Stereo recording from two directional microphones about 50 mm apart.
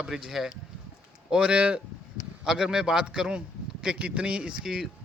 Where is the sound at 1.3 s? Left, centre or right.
Right.